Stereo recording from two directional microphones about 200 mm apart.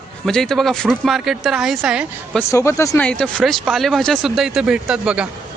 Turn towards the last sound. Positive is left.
turn(degrees=-5)  # may be behind; listen again after turning